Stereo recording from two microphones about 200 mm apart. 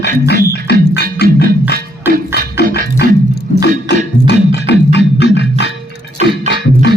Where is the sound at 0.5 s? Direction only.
55° left (ahead or behind).